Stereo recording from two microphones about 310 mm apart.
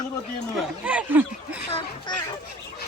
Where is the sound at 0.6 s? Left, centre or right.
Centre.